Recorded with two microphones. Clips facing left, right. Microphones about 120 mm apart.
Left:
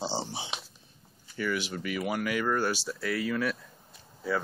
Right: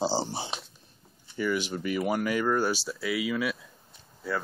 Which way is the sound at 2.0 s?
30° right (ahead or behind).